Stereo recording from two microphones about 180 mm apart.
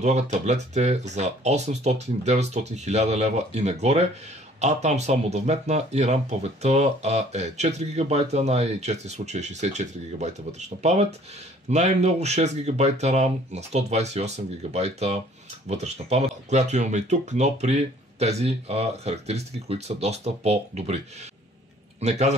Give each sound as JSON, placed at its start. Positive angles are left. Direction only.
{"t": 0.0, "sound": "speech", "side_deg": -40}